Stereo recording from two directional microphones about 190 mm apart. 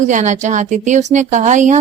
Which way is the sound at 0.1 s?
40° right (ahead or behind).